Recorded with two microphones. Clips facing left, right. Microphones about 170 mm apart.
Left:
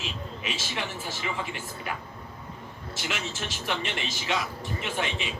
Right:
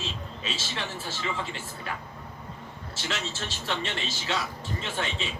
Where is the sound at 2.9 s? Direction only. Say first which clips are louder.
Even; 15° left (ahead or behind).